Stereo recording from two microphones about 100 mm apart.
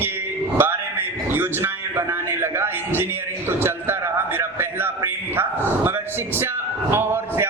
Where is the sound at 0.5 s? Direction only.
20° right (ahead or behind).